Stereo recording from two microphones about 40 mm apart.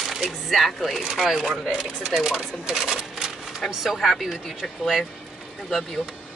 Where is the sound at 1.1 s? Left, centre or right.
Centre.